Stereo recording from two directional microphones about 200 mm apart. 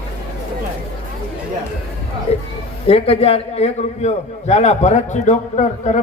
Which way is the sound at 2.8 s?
30° left (ahead or behind).